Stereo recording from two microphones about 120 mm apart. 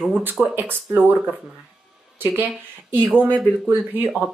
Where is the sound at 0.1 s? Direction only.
15° right (ahead or behind).